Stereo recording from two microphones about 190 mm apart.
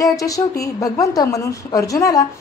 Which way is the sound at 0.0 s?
20° left (ahead or behind).